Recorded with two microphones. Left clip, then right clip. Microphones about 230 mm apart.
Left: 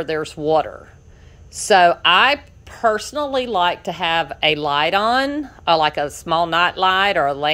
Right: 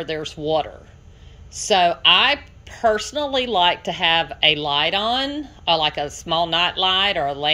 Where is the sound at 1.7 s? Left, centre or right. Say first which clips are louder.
Left 3 dB; centre.